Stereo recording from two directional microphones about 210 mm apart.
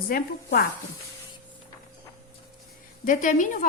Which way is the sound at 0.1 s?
45° left (ahead or behind).